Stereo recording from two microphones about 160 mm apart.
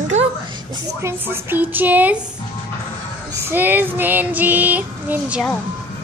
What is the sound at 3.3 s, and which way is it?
Female singing, 15° right (ahead or behind).